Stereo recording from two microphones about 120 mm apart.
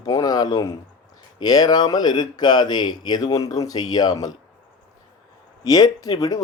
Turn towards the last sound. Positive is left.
turn(degrees=30)  # may be behind; listen again after turning